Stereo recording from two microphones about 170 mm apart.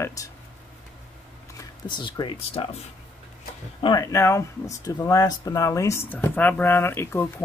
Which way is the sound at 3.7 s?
25° left (ahead or behind).